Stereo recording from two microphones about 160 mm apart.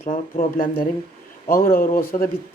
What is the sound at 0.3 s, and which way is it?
Speech, 60° left (ahead or behind).